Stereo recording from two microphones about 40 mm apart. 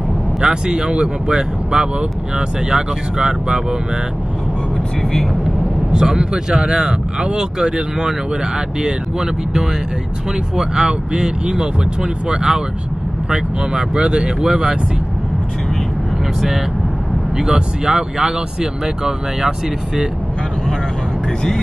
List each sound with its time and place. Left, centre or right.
0.4 s speech: centre
5.9 s speech: centre
17.5 s speech: right